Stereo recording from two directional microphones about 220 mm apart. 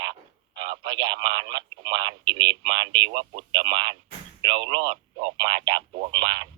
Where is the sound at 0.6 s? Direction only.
20° right (ahead or behind).